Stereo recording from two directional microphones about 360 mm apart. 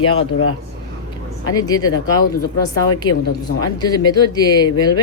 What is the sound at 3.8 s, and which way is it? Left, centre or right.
Speech, centre.